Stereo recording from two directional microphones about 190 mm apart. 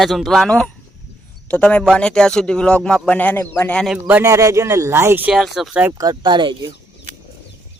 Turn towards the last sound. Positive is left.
turn(degrees=-25)  # may be behind; listen again after turning